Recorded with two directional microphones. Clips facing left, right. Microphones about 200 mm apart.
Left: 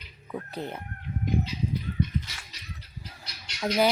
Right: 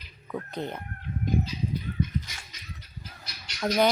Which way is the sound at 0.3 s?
10° left (ahead or behind).